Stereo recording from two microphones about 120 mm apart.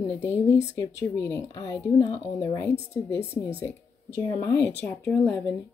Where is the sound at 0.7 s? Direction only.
25° left (ahead or behind).